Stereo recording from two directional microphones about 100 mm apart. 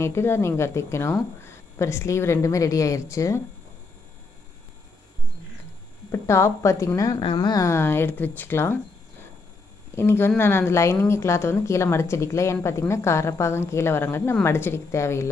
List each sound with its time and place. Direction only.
0.0 s speech: 25° left (ahead or behind)
6.1 s a woman's voice: 25° left (ahead or behind)
7.2 s speech: 50° left (ahead or behind); by 8.7 s 25° left (ahead or behind)
9.9 s speech: 25° left (ahead or behind)